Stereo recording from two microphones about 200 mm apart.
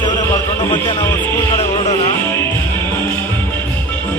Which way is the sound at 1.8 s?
35° left (ahead or behind).